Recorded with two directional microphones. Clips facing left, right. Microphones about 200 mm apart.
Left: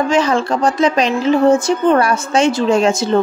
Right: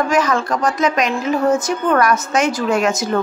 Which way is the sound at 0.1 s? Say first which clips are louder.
Left 2 dB; 30° left (ahead or behind).